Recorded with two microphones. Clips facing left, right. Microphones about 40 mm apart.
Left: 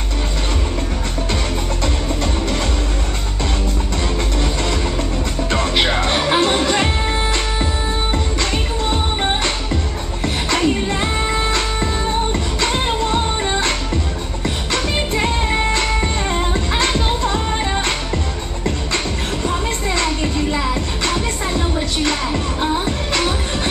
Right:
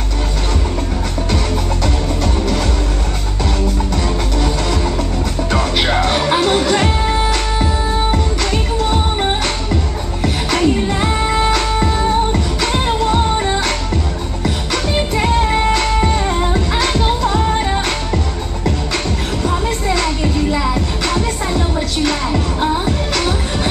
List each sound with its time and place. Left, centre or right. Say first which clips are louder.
5.5 s music: right 1 dB; centre
10.2 s music: right 2 dB; centre
12.7 s music: right 5 dB; centre
15.0 s music: right 7 dB; centre
19.4 s music: right 3 dB; centre